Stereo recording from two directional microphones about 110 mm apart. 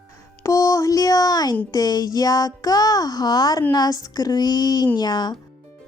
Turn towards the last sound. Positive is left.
turn(degrees=40)  # may be behind; listen again after turning